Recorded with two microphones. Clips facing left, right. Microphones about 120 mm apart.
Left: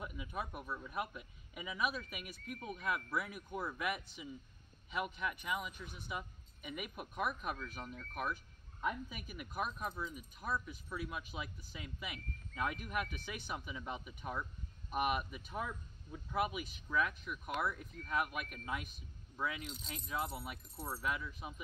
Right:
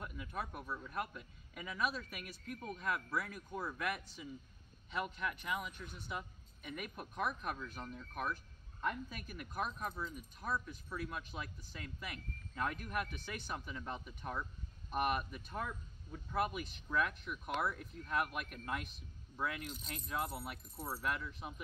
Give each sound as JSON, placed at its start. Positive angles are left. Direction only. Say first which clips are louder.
{"t": 0.0, "sound": "a man's voice", "louder": "left 1 dB", "side_deg": 10}